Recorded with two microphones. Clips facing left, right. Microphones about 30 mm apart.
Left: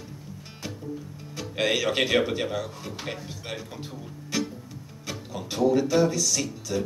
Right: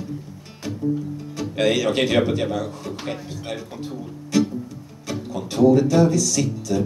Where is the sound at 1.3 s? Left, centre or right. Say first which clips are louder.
Right 5 dB; centre.